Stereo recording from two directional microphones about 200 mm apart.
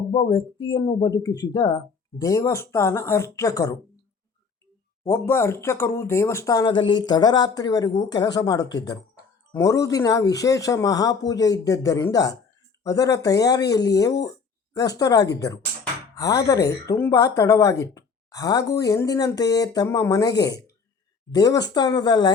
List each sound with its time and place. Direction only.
0.1 s speech: 25° left (ahead or behind)
5.0 s speech: 15° left (ahead or behind)